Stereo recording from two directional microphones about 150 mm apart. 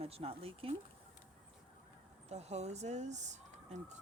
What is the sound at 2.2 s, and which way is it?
Speech, 45° right (ahead or behind).